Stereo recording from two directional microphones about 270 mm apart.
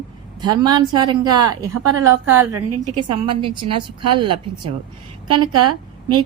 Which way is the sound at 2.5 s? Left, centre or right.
Right.